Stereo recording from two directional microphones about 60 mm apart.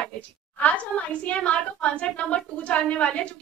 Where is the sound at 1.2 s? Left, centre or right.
Left.